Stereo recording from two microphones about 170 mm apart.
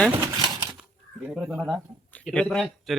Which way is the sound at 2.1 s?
5° left (ahead or behind).